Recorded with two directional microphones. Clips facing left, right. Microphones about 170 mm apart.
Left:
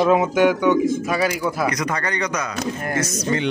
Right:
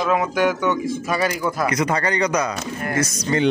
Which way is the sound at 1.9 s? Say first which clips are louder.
Right 4 dB; 30° right (ahead or behind).